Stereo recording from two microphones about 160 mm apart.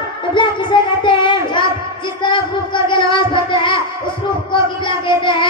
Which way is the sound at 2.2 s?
30° left (ahead or behind).